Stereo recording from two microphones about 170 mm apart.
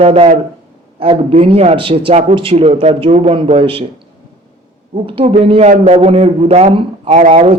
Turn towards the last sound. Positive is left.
turn(degrees=-40)  # may be behind; listen again after turning